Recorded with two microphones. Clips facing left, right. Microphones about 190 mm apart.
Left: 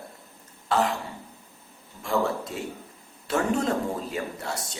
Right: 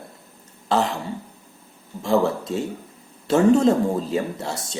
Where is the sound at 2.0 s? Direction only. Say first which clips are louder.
Right 6 dB; 25° right (ahead or behind).